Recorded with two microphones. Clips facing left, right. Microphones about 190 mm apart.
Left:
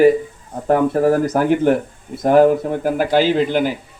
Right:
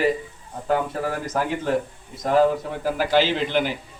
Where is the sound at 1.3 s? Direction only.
65° left (ahead or behind).